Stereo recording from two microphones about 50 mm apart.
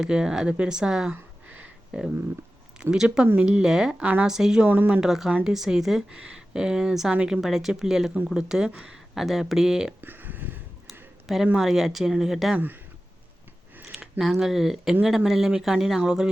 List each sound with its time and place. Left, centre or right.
0.0 s speech: centre
4.0 s speech: right
4.3 s speech: centre
4.6 s speech: right
4.9 s speech: centre
6.1 s speech: centre
10.0 s a sound: right
11.3 s speech: centre
12.5 s speech: right
13.9 s speech: centre